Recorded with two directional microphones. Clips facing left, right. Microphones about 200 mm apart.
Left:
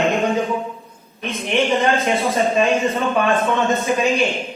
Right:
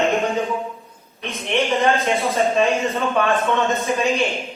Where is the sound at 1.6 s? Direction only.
Centre (ahead or behind).